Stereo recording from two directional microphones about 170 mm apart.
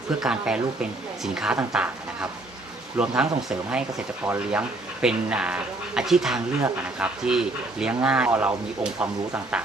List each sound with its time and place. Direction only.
0.2 s speech: 5° right (ahead or behind)
3.0 s speech: 5° right (ahead or behind)